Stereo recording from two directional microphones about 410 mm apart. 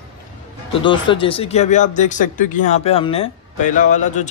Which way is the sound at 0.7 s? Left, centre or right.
Centre.